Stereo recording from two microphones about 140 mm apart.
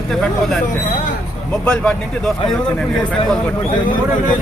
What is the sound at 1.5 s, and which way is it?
Speech, 10° left (ahead or behind).